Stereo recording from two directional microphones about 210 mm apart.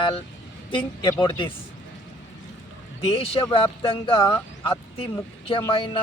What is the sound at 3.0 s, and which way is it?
Speech, 25° left (ahead or behind).